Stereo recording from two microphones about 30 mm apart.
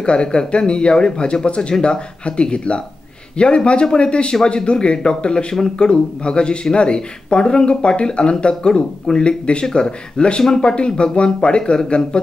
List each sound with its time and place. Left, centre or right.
0.0 s speech: left